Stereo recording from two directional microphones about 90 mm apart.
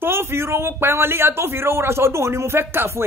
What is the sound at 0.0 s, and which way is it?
Speech, 25° right (ahead or behind).